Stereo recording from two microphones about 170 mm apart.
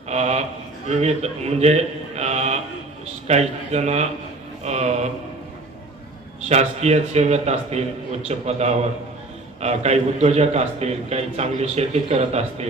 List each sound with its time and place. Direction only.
0.1 s a man's voice: 40° right (ahead or behind)
4.6 s a sound: 40° right (ahead or behind)
6.5 s a man's voice: 40° right (ahead or behind)